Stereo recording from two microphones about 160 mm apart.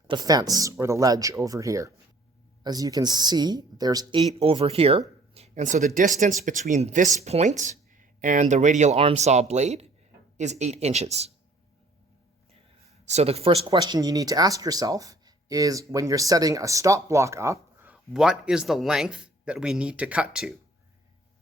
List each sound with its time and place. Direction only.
0.1 s speech: 25° right (ahead or behind)
4.4 s speech: 35° right (ahead or behind)
13.1 s a man's voice: 40° right (ahead or behind)
13.7 s speech: 25° right (ahead or behind); by 20.6 s 5° right (ahead or behind)